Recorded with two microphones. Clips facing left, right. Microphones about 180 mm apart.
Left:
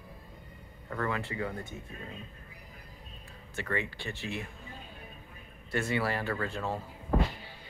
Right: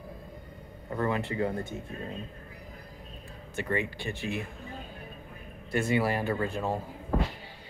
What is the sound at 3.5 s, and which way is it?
Speech, 15° right (ahead or behind).